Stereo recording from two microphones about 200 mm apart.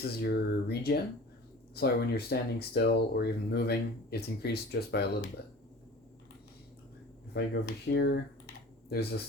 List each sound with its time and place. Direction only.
0.0 s speech: 50° left (ahead or behind)
7.3 s speech: 55° left (ahead or behind)